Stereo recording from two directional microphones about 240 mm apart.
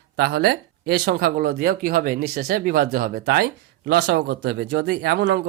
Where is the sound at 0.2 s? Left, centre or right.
Right.